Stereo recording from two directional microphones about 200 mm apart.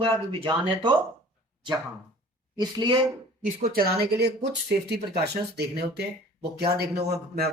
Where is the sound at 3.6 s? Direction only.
50° right (ahead or behind).